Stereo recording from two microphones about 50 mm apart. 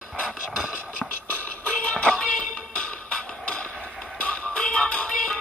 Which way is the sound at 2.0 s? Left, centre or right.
Centre.